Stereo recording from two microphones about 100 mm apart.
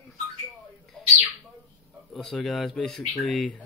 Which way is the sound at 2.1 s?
Centre (ahead or behind).